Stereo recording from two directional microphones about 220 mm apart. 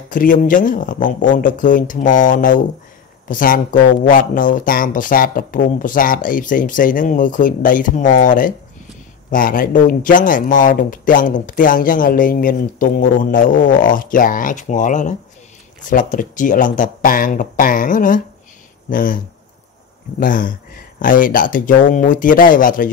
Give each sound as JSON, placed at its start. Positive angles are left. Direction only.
{"t": 0.1, "sound": "speech", "side_deg": 40}